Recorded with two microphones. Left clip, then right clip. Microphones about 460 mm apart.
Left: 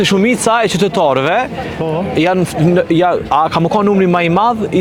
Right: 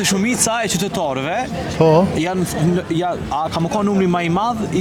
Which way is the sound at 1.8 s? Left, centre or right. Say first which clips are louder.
Right 6 dB; right.